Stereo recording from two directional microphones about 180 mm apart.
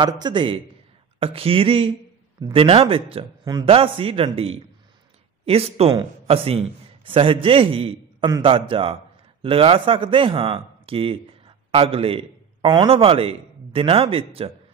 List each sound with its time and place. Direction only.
0.0 s a man's voice: 25° right (ahead or behind)